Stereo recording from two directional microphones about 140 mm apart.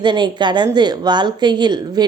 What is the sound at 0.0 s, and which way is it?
A woman's voice, 35° right (ahead or behind).